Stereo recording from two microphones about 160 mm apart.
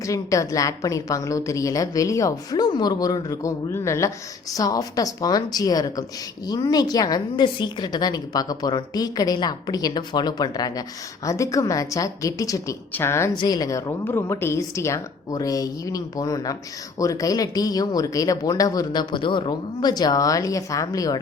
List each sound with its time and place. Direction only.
0.0 s a woman's voice: 20° left (ahead or behind)
13.3 s a woman's voice: 25° left (ahead or behind)